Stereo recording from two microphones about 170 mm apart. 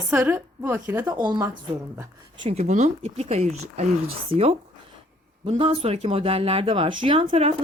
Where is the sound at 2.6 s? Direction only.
45° right (ahead or behind).